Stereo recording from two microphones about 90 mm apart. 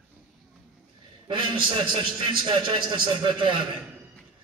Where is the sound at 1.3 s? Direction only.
65° right (ahead or behind).